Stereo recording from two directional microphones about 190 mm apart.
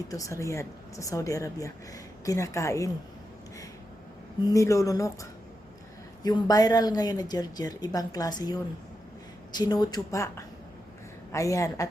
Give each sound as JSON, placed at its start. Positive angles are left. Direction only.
{"t": 0.1, "sound": "speech", "side_deg": 15}
{"t": 4.4, "sound": "speech", "side_deg": 15}